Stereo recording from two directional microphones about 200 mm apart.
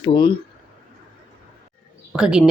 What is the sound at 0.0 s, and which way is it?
Speech, 25° left (ahead or behind).